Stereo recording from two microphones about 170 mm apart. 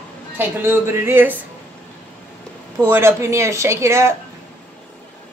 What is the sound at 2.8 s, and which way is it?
Speech, 15° right (ahead or behind).